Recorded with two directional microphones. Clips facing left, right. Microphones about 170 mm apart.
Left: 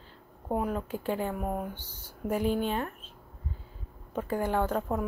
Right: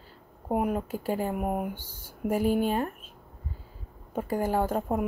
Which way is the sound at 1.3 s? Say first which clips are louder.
Right 3 dB; 15° right (ahead or behind).